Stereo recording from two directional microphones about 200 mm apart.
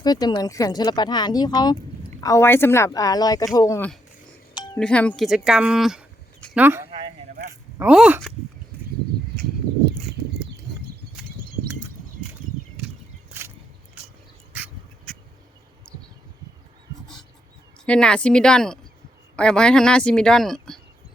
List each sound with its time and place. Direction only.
0.0 s speech: 20° left (ahead or behind)
4.5 s music: 20° left (ahead or behind)
4.8 s speech: 5° left (ahead or behind); by 6.8 s 10° right (ahead or behind)
7.3 s a sound: 40° right (ahead or behind)
7.8 s speech: 5° right (ahead or behind)
13.4 s a sound: 10° right (ahead or behind)
17.8 s speech: 5° left (ahead or behind)